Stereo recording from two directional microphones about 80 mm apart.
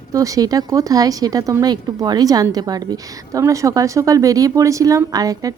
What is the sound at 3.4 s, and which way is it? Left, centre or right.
Speech, right.